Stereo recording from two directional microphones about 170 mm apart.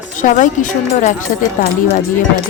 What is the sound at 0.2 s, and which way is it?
Speech, 50° left (ahead or behind).